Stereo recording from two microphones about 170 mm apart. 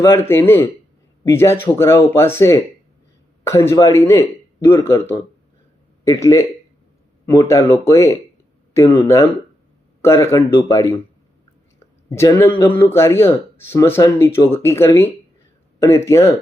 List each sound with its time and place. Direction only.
0.0 s speech: 15° left (ahead or behind)
12.0 s speech: 15° left (ahead or behind)